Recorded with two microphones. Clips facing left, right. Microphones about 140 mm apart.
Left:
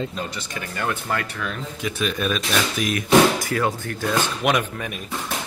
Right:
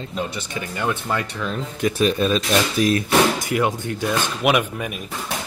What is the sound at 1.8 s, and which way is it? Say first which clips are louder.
Speech: right 7 dB; 40° right (ahead or behind).